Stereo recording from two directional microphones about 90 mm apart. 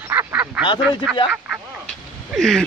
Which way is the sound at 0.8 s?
15° right (ahead or behind).